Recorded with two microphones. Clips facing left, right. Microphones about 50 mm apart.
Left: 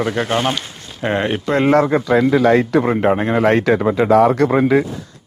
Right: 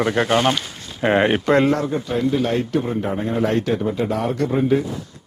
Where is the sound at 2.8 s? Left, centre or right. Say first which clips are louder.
Left 7 dB; left.